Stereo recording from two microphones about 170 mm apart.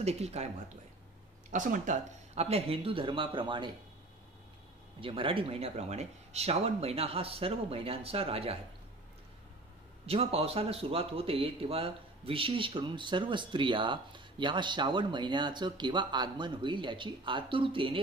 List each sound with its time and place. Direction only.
0.0 s speech: 40° right (ahead or behind)
1.5 s speech: 50° right (ahead or behind); by 3.7 s 30° right (ahead or behind)
5.0 s speech: 30° right (ahead or behind)
10.0 s speech: 35° right (ahead or behind)